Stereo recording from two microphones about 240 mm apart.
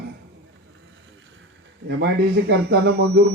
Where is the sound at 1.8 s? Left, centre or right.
Right.